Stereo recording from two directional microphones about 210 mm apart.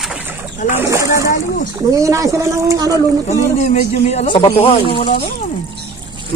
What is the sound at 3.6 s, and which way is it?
Speech, 30° left (ahead or behind).